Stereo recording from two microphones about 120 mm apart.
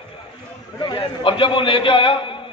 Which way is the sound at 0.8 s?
40° left (ahead or behind).